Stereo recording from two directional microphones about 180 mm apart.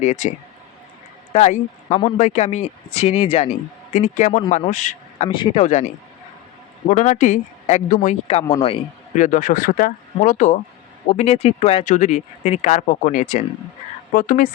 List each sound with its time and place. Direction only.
0.0 s speech: 40° left (ahead or behind)
1.3 s a man's voice: 40° left (ahead or behind)
5.3 s speech: 25° left (ahead or behind)
6.9 s speech: 40° left (ahead or behind)